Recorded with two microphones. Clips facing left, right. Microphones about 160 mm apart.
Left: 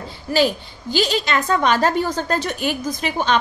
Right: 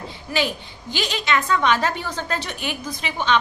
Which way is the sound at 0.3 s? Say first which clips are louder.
Left 6 dB; 35° left (ahead or behind).